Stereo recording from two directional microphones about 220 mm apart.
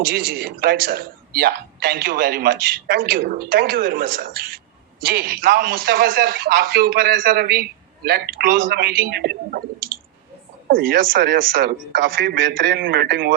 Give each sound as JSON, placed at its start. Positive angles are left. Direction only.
{"t": 0.0, "sound": "a man's voice", "side_deg": -40}